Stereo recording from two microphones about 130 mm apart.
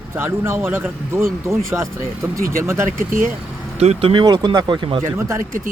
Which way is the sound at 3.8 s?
50° right (ahead or behind).